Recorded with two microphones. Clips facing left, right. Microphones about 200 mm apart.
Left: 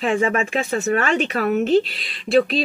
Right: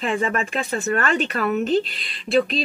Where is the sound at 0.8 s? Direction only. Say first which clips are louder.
Left 1 dB; centre (ahead or behind).